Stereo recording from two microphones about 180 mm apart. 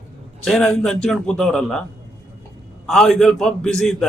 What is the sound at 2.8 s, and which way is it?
A man's voice, 5° left (ahead or behind).